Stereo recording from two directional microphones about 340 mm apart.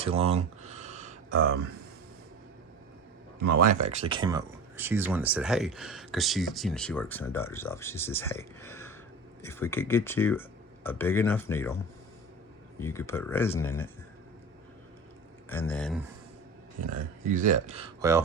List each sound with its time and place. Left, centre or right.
0.0 s a sound: centre
3.3 s speech: right; by 11.8 s centre
12.8 s speech: centre
15.4 s speech: centre
17.2 s speech: right